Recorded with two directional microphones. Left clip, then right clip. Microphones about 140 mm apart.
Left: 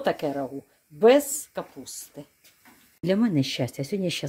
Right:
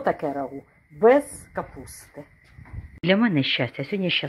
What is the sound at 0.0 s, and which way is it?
Speech, 30° left (ahead or behind).